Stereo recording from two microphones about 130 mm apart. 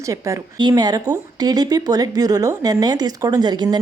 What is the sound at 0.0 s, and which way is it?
Speech, 25° right (ahead or behind).